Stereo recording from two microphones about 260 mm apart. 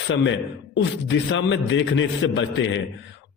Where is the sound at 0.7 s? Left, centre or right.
Left.